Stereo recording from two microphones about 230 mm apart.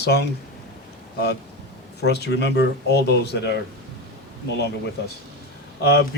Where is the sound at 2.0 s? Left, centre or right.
Left.